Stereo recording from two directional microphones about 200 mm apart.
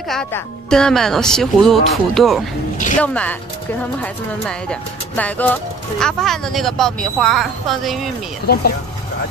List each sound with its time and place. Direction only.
0.1 s speech: 5° left (ahead or behind)
8.5 s speech: 50° left (ahead or behind)